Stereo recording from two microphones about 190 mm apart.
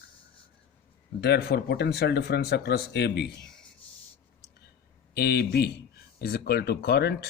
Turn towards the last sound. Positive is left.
turn(degrees=55)  # may be behind; listen again after turning